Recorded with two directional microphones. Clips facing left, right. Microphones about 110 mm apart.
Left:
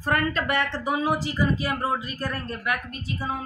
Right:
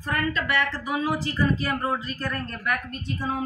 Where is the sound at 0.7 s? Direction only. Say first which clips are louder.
Left 2 dB; 20° left (ahead or behind).